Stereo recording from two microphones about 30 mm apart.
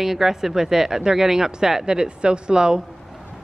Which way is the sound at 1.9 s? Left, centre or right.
Right.